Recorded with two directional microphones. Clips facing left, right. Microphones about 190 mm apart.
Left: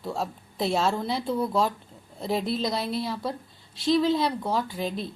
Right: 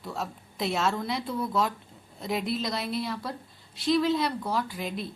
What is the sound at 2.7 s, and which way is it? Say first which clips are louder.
Speech: left 2 dB; centre (ahead or behind).